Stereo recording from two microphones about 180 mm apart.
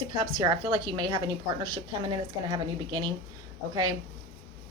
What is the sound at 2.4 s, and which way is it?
Speech, 25° right (ahead or behind).